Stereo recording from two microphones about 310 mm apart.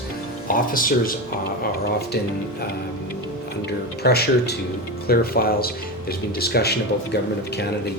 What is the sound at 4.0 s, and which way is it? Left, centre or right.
Speech, left.